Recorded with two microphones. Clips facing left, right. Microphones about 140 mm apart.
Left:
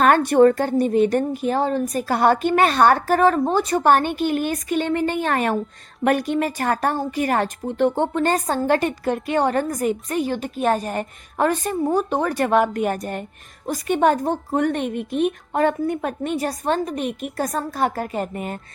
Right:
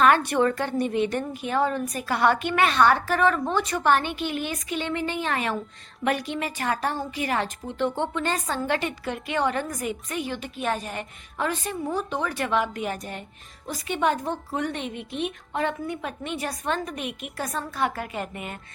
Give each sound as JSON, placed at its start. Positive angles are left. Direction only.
{"t": 0.0, "sound": "a woman's voice", "side_deg": 45}